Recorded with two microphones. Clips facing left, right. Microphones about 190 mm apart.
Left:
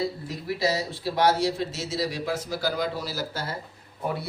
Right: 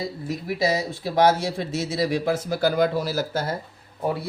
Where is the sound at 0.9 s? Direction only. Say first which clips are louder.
Right 4 dB; 50° right (ahead or behind).